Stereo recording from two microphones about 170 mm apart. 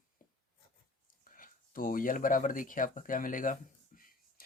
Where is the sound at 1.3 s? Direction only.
55° left (ahead or behind).